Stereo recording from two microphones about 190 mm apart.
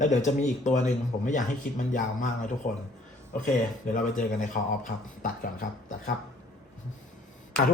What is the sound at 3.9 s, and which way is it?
Speech, 40° left (ahead or behind).